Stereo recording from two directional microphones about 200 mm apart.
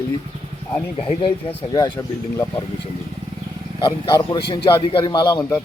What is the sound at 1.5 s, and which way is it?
Speech, 20° left (ahead or behind).